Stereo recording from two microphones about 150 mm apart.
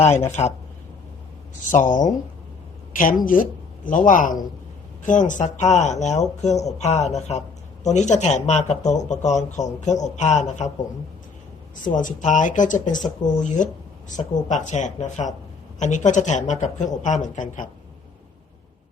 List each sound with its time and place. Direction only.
0.3 s speech: 50° left (ahead or behind)
1.6 s speech: 55° left (ahead or behind)
11.9 s speech: 55° left (ahead or behind)